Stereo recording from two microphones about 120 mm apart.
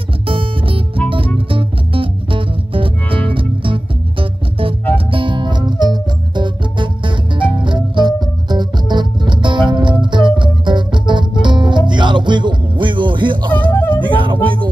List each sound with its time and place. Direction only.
0.3 s music: 50° right (ahead or behind)
13.7 s music: 15° left (ahead or behind)
14.1 s a sound: 45° right (ahead or behind)